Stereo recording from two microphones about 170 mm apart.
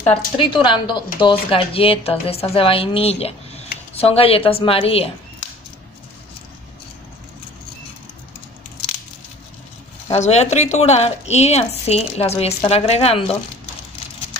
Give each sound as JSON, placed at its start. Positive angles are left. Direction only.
{"t": 0.4, "sound": "a woman's voice", "side_deg": 30}
{"t": 10.1, "sound": "a woman's voice", "side_deg": 40}